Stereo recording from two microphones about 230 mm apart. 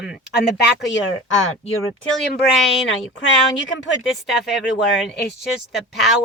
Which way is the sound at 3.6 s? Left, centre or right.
Left.